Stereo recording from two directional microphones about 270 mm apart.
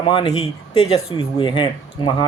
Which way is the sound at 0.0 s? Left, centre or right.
Centre.